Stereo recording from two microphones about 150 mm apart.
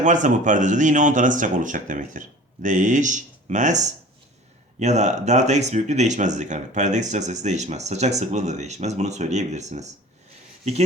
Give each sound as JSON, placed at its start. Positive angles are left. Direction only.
{"t": 0.0, "sound": "speech", "side_deg": -55}